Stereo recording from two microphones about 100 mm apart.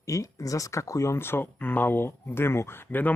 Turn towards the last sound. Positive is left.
turn(degrees=25)  # may be behind; listen again after turning